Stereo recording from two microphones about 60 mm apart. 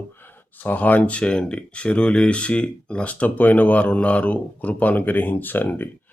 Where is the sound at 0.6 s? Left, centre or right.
Left.